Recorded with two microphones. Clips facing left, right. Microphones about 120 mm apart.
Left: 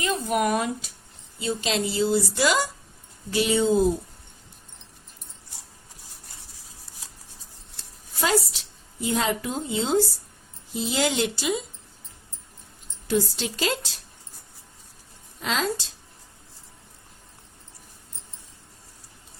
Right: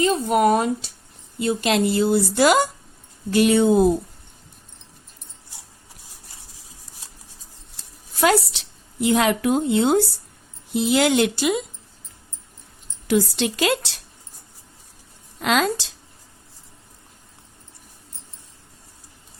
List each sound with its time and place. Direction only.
0.0 s speech: 30° right (ahead or behind)
1.4 s a woman's voice: 55° right (ahead or behind)
8.2 s a woman's voice: 70° right (ahead or behind)
13.1 s speech: 85° right
15.4 s a woman's voice: 70° right (ahead or behind)